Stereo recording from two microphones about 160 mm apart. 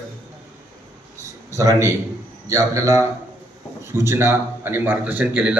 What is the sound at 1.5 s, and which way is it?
A man's voice, 20° right (ahead or behind).